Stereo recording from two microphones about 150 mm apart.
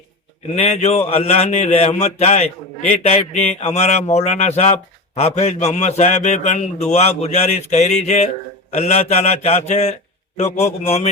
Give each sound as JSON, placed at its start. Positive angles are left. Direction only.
{"t": 0.5, "sound": "speech", "side_deg": 45}